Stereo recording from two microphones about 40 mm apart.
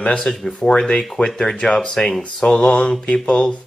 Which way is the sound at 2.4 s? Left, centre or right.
Left.